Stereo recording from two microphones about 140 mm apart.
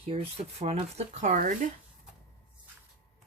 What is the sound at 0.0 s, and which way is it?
Speech, 45° right (ahead or behind).